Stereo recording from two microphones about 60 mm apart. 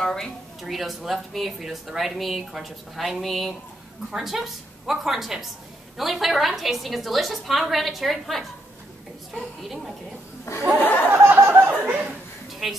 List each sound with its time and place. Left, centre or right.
0.0 s a woman's voice: centre
0.6 s speech: centre
9.6 s speech: centre
10.5 s speech: left
11.1 s a sound: right
11.8 s speech: right
12.4 s a sound: centre